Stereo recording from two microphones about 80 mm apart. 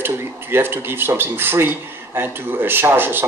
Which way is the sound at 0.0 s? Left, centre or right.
Right.